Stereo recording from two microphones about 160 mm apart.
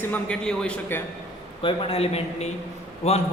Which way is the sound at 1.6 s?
35° left (ahead or behind).